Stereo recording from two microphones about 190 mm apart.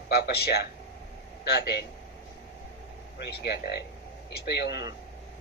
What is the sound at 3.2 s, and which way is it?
A man's voice, 60° left (ahead or behind).